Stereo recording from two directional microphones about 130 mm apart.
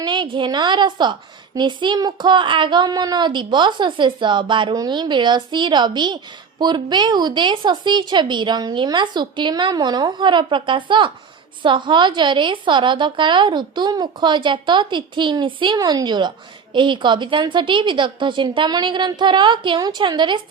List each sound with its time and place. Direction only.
0.0 s a woman's voice: 35° right (ahead or behind)